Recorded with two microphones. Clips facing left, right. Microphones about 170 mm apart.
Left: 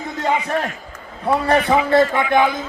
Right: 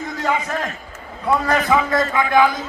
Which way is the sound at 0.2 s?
30° left (ahead or behind).